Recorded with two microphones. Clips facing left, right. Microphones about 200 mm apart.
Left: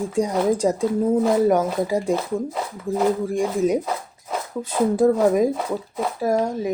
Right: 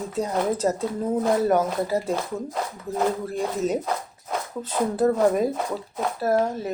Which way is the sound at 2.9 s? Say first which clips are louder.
Left 6 dB; 25° left (ahead or behind).